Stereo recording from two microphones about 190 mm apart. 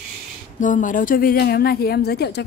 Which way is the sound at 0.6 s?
45° left (ahead or behind).